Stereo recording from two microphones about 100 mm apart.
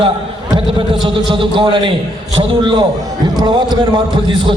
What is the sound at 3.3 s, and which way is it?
Speech, 45° right (ahead or behind).